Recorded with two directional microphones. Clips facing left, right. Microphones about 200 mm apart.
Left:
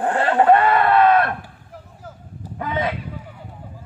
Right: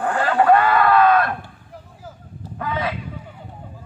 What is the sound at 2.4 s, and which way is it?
Honk, 25° left (ahead or behind).